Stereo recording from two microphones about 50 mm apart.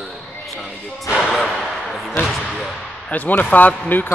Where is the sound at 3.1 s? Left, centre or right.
Left.